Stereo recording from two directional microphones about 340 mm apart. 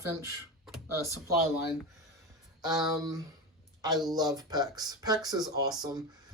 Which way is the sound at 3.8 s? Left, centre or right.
Centre.